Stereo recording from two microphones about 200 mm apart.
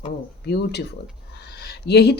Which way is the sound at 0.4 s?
55° left (ahead or behind).